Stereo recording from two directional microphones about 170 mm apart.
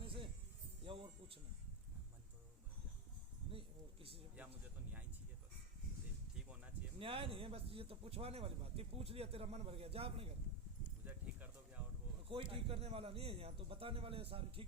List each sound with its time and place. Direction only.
0.0 s music: 30° right (ahead or behind)
3.5 s speech: 35° right (ahead or behind)
6.3 s a sound: 5° right (ahead or behind)
7.0 s a man's voice: 35° right (ahead or behind)
11.0 s a sound: 10° right (ahead or behind)
12.3 s a man's voice: 35° right (ahead or behind)